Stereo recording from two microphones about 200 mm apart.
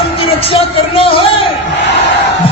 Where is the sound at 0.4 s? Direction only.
30° left (ahead or behind).